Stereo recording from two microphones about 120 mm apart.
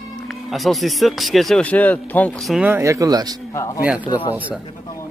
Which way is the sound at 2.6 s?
20° right (ahead or behind).